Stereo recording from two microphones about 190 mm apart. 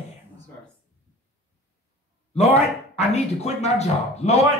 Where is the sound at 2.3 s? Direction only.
35° left (ahead or behind).